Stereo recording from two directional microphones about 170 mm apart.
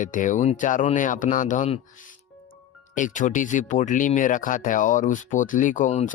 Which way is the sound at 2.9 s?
50° left (ahead or behind).